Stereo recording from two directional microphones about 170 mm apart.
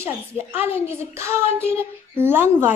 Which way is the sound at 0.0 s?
15° right (ahead or behind).